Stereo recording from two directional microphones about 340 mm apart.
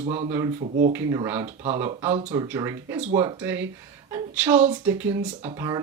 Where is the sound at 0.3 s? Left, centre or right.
Centre.